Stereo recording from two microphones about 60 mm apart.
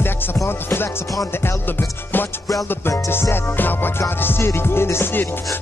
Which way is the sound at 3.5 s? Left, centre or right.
Left.